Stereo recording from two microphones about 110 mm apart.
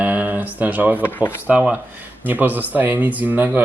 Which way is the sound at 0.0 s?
15° right (ahead or behind).